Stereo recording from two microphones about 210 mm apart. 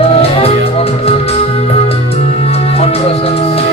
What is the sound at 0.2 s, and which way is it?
Music, 30° left (ahead or behind).